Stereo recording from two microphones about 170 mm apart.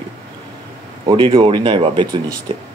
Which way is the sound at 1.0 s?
30° right (ahead or behind).